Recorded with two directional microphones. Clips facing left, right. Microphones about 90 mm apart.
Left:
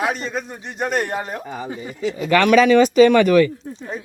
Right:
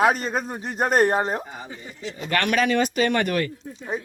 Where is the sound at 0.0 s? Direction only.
40° right (ahead or behind).